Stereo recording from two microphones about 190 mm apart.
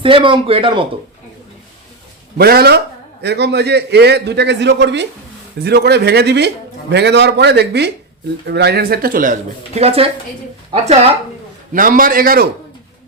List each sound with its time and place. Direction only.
0.0 s a man's voice: 25° right (ahead or behind)
2.4 s a man's voice: 55° right (ahead or behind); by 11.2 s 30° right (ahead or behind)
11.7 s speech: 45° right (ahead or behind)